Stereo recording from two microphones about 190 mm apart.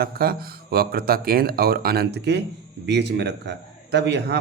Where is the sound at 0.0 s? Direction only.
55° right (ahead or behind).